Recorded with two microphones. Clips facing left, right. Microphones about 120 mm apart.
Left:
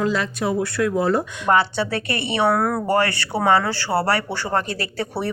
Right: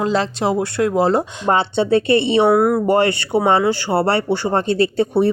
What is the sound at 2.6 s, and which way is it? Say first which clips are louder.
Speech: right 7 dB; 10° right (ahead or behind).